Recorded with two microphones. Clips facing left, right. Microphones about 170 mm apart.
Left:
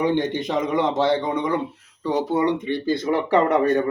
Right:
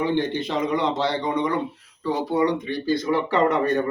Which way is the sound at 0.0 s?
15° left (ahead or behind).